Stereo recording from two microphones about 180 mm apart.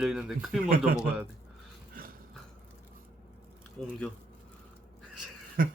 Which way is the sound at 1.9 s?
50° right (ahead or behind).